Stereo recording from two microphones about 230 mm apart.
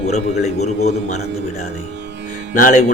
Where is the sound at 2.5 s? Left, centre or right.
Left.